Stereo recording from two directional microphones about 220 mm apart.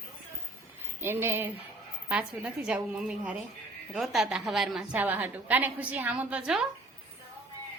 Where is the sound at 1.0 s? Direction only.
10° right (ahead or behind).